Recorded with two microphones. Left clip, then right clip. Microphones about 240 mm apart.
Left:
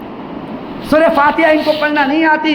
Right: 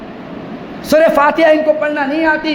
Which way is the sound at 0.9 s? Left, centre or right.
Right.